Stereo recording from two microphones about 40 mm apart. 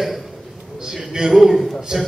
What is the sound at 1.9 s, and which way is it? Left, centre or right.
Speech, centre.